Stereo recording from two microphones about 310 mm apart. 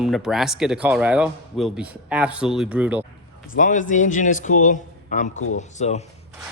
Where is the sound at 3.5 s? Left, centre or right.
Left.